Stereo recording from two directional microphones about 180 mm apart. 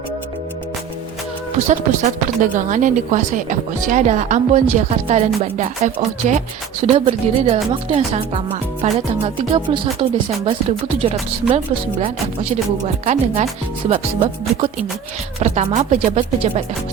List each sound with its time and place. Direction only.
1.5 s speech: 40° right (ahead or behind)
13.1 s speech: 45° right (ahead or behind)
13.9 s music: 30° right (ahead or behind)
15.4 s speech: 40° right (ahead or behind)